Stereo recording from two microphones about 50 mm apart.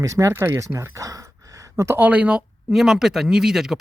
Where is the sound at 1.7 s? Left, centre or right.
Right.